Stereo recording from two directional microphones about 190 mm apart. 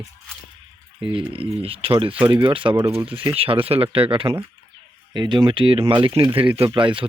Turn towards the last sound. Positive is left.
turn(degrees=-25)  # may be behind; listen again after turning